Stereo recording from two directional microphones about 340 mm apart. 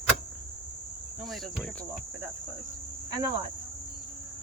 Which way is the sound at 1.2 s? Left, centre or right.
Centre.